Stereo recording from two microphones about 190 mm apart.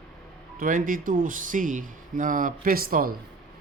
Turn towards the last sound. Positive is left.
turn(degrees=-50)  # may be behind; listen again after turning